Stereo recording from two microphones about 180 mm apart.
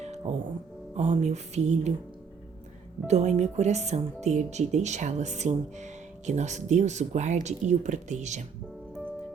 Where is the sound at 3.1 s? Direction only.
40° right (ahead or behind).